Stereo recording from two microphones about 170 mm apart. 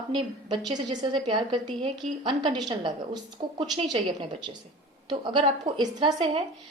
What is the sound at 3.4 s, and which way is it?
Speech, 35° right (ahead or behind).